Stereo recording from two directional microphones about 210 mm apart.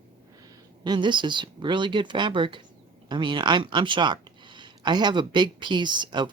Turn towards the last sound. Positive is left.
turn(degrees=-20)  # may be behind; listen again after turning